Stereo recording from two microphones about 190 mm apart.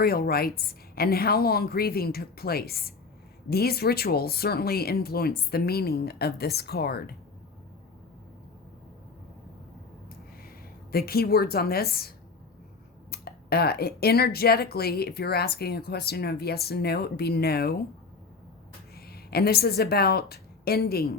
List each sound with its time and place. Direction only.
0.0 s a woman's voice: 55° left (ahead or behind)
10.9 s a woman's voice: 55° left (ahead or behind)
18.9 s a woman's voice: 55° left (ahead or behind)